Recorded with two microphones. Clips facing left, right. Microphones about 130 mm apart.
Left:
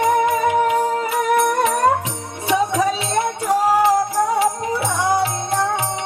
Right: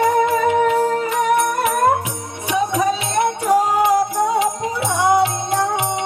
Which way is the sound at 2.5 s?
15° right (ahead or behind).